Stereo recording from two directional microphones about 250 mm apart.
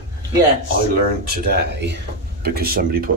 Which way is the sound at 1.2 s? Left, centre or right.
Right.